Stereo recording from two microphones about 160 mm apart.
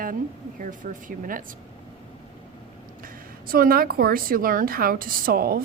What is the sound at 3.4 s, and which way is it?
A woman's voice, 65° right (ahead or behind).